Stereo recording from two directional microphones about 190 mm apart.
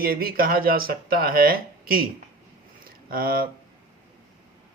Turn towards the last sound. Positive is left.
turn(degrees=-50)  # may be behind; listen again after turning